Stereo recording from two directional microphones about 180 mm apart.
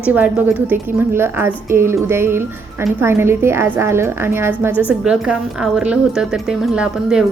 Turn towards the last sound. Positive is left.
turn(degrees=-5)  # may be behind; listen again after turning